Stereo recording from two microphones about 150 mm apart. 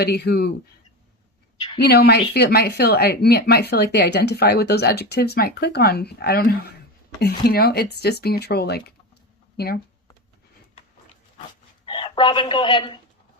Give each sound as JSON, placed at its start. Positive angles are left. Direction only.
{"t": 0.0, "sound": "speech", "side_deg": 90}
{"t": 1.9, "sound": "speech", "side_deg": 90}
{"t": 11.9, "sound": "speech", "side_deg": 35}